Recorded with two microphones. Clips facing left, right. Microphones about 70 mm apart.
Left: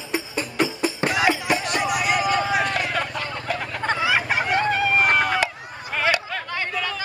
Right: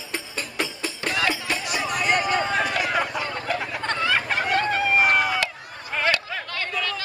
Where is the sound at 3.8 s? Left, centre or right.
Centre.